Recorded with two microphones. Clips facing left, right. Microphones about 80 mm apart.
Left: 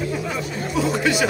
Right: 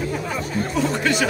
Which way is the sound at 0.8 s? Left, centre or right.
Centre.